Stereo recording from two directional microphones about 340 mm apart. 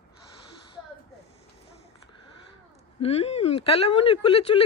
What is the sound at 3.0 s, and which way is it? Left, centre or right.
Speech, centre.